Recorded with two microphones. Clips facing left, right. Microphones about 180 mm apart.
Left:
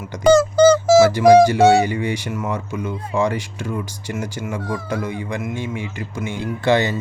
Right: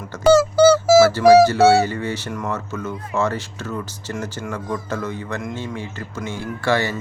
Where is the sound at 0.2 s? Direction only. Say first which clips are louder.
Left 1 dB; 5° right (ahead or behind).